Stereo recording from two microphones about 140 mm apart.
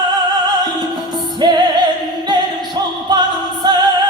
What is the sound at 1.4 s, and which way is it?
Music, 30° right (ahead or behind).